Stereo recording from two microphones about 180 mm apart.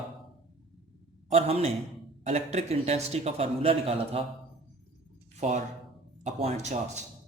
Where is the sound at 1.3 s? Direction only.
35° right (ahead or behind).